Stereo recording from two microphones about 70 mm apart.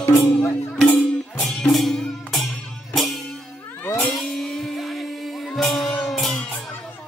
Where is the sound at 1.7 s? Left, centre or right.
Centre.